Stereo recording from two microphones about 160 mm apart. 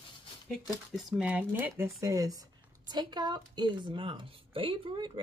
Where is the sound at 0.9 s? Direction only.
5° right (ahead or behind).